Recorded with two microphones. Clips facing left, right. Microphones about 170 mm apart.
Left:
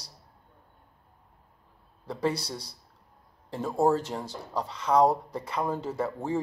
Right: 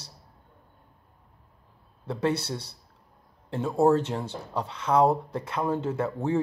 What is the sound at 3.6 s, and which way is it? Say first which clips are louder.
Speech: right 3 dB; 5° right (ahead or behind).